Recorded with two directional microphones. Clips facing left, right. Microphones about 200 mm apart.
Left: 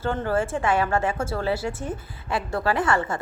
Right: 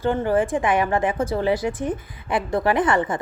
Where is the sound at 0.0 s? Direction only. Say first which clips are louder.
Right 4 dB; 15° right (ahead or behind).